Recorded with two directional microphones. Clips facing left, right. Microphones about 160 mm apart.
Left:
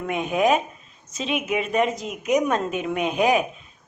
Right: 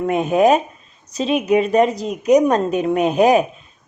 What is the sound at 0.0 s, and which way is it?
A woman's voice, 40° right (ahead or behind).